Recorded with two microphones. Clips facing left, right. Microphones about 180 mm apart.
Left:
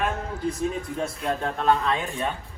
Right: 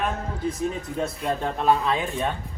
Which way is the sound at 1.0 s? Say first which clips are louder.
Right 3 dB; centre (ahead or behind).